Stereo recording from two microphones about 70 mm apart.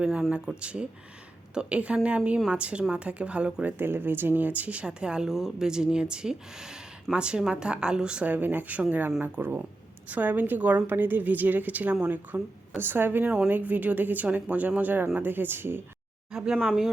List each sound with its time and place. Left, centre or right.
0.0 s a woman's voice: centre; by 15.8 s right
16.3 s speech: centre